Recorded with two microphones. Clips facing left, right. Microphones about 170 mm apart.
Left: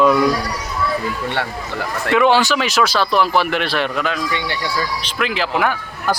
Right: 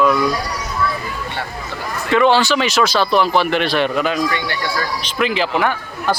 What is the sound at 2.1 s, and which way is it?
A man's voice, 10° left (ahead or behind).